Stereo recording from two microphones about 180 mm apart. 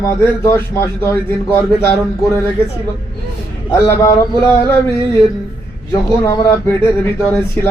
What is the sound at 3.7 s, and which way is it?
A man's voice, 15° left (ahead or behind).